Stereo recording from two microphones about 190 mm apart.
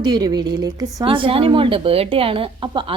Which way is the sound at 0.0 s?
20° right (ahead or behind).